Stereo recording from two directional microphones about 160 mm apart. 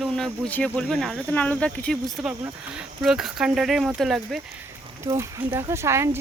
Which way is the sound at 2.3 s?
10° right (ahead or behind).